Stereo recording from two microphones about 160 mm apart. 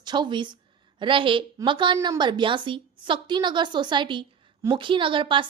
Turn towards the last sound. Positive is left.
turn(degrees=-30)  # may be behind; listen again after turning